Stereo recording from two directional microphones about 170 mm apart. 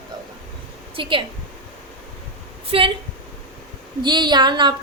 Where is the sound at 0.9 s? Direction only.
30° right (ahead or behind).